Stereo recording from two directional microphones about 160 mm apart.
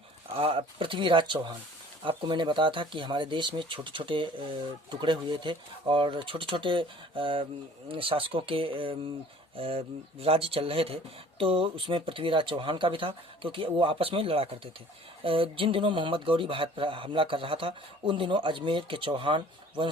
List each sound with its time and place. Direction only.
0.3 s speech: 35° right (ahead or behind)